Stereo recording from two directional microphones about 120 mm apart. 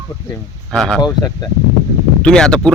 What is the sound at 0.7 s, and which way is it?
Speech, centre (ahead or behind).